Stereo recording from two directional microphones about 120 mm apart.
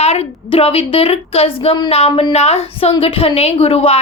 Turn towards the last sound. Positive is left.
turn(degrees=55)  # may be behind; listen again after turning